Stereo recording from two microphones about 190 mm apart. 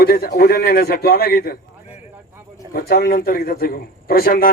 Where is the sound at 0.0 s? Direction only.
55° left (ahead or behind).